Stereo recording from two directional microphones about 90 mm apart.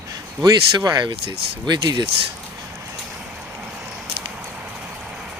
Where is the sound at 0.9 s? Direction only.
50° right (ahead or behind).